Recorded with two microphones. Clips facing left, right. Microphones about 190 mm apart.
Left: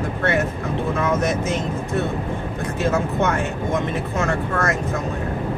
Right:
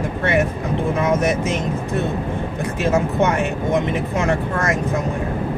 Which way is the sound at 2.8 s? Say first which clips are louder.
Right 3 dB; 15° right (ahead or behind).